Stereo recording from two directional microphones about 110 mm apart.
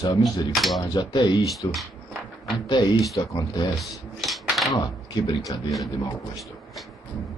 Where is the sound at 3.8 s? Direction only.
Centre (ahead or behind).